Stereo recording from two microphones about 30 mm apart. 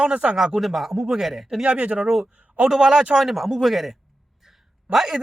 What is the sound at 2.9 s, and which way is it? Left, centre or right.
Speech, right.